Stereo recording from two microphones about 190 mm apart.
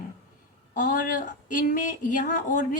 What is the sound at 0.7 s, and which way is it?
A woman's voice, 40° left (ahead or behind).